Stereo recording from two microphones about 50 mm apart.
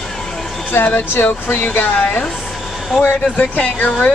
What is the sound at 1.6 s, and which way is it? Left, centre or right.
Speech, left.